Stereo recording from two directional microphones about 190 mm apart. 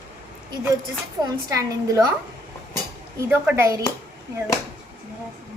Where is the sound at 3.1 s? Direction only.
10° right (ahead or behind).